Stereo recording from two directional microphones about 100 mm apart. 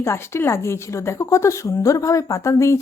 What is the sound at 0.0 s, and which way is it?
A woman's voice, 25° left (ahead or behind).